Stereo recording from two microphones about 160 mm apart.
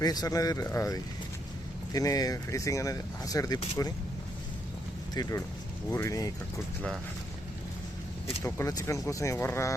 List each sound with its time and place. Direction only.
0.0 s speech: 25° left (ahead or behind)
5.1 s speech: 25° left (ahead or behind)
8.4 s speech: 20° left (ahead or behind)